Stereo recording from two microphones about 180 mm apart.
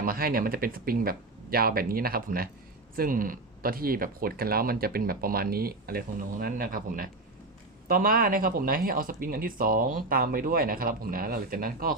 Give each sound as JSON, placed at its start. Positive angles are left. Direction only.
{"t": 0.0, "sound": "speech", "side_deg": -55}